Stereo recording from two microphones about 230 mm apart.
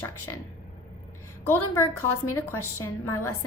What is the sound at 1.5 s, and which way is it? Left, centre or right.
A woman's voice, centre.